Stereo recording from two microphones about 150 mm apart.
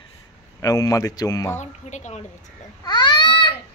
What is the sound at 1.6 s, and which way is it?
Speech, 50° left (ahead or behind).